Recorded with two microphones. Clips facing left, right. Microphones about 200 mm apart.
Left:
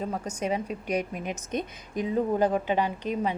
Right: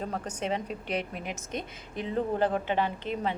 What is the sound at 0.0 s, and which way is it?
A woman's voice, 10° left (ahead or behind).